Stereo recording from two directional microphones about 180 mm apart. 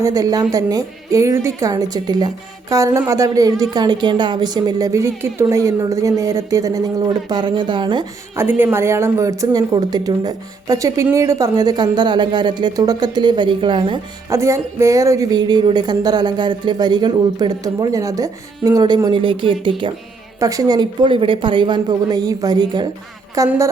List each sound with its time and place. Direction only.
0.0 s speech: 20° right (ahead or behind)
8.4 s speech: 10° right (ahead or behind)
14.3 s speech: 15° right (ahead or behind)